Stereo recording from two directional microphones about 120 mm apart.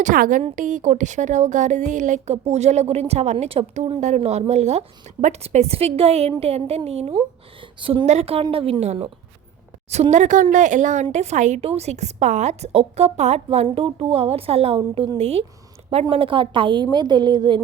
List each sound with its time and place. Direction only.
0.0 s a woman's voice: 90° right; by 3.9 s 55° right (ahead or behind)
4.0 s a woman's voice: 75° right (ahead or behind)
7.6 s a woman's voice: 45° right (ahead or behind)
8.0 s a woman's voice: 60° right (ahead or behind); by 11.0 s 90° right
11.1 s a woman's voice: 70° right (ahead or behind)
13.7 s a woman's voice: 55° right (ahead or behind)
14.8 s a woman's voice: 40° right (ahead or behind)